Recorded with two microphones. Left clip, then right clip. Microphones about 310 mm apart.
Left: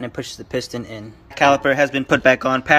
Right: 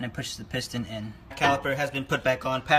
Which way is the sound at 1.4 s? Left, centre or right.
Centre.